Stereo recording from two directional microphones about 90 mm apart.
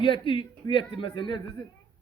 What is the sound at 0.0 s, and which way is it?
A man's voice, 70° left (ahead or behind).